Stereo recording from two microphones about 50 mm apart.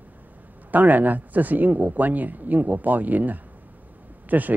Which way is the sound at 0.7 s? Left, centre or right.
Right.